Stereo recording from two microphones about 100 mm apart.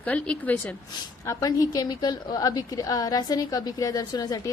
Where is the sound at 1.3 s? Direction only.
35° left (ahead or behind).